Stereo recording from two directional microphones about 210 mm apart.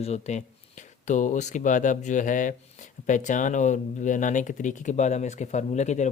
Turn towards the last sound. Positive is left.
turn(degrees=35)  # may be behind; listen again after turning